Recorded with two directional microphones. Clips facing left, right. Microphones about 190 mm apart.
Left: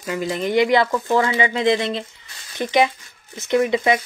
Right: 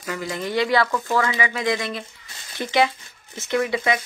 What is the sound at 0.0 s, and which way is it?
Speech, 20° left (ahead or behind).